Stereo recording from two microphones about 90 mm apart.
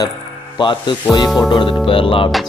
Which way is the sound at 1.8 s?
85° left.